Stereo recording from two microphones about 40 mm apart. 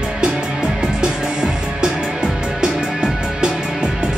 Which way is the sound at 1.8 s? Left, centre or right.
Centre.